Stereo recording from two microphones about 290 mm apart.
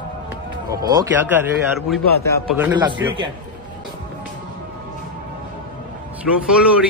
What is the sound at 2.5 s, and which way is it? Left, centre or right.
Speech, centre.